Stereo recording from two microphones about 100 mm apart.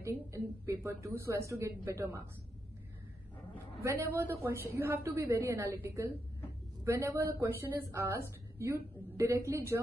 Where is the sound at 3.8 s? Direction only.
25° right (ahead or behind).